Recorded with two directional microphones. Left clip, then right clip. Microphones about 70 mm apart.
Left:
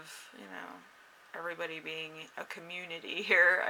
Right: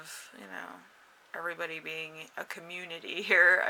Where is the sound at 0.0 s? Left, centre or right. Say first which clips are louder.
Right 2 dB; right.